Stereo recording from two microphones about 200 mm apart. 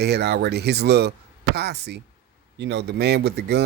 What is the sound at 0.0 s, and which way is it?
Speech, 55° right (ahead or behind).